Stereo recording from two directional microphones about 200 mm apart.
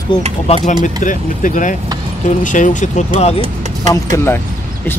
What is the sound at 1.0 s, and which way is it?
Speech, 40° left (ahead or behind).